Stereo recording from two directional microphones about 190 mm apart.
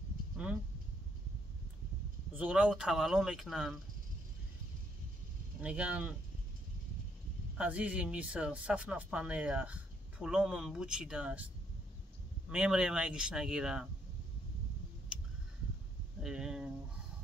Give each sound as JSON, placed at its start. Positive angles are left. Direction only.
{"t": 2.3, "sound": "speech", "side_deg": -5}
{"t": 5.6, "sound": "speech", "side_deg": -5}
{"t": 7.5, "sound": "speech", "side_deg": -5}
{"t": 16.2, "sound": "speech", "side_deg": -5}